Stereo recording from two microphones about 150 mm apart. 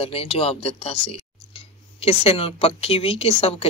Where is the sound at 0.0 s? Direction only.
40° left (ahead or behind).